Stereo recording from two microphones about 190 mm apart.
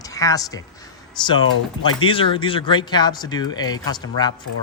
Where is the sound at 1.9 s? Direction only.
25° left (ahead or behind).